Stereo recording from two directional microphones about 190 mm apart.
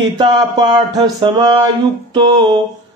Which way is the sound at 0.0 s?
25° right (ahead or behind).